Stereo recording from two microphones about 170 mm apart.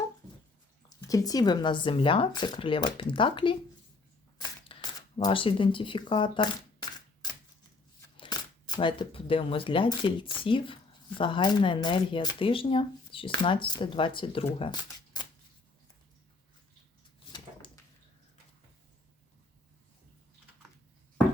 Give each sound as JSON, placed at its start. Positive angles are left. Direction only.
{"t": 0.9, "sound": "speech", "side_deg": 20}
{"t": 4.7, "sound": "speech", "side_deg": 25}
{"t": 8.1, "sound": "speech", "side_deg": 25}
{"t": 14.6, "sound": "shuffling cards", "side_deg": 25}